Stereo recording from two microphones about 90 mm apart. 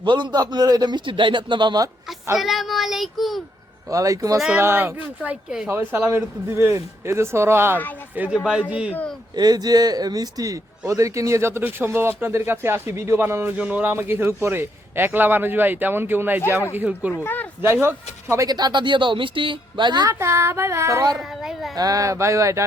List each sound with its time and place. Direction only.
0.0 s a man's voice: 60° right (ahead or behind)
2.4 s speech: centre (ahead or behind)
3.8 s speech: 40° right (ahead or behind)
4.5 s a man's voice: 25° right (ahead or behind)
5.2 s speech: 10° right (ahead or behind)
5.9 s a man's voice: 25° right (ahead or behind)
9.3 s a man's voice: 45° right (ahead or behind); by 17.1 s 20° right (ahead or behind)
17.2 s speech: 20° left (ahead or behind)
17.6 s a man's voice: 25° right (ahead or behind)
18.4 s a man's voice: 50° right (ahead or behind)
20.1 s speech: 30° right (ahead or behind)
21.2 s speech: 5° right (ahead or behind)
21.8 s speech: 40° right (ahead or behind)